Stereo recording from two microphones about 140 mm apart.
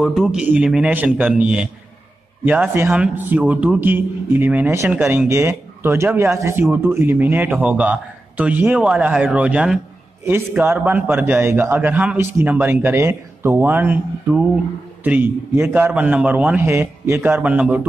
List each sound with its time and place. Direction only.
0.0 s a man's voice: 5° right (ahead or behind)